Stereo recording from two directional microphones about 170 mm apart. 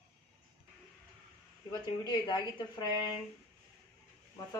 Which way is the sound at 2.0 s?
25° left (ahead or behind).